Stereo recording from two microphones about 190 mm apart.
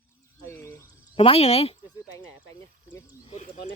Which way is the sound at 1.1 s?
30° left (ahead or behind).